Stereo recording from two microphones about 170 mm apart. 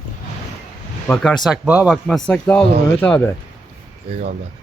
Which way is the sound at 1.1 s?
5° left (ahead or behind).